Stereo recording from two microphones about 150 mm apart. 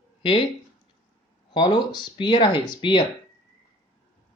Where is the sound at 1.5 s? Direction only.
30° left (ahead or behind).